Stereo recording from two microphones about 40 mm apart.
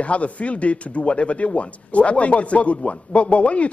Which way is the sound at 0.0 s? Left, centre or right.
Left.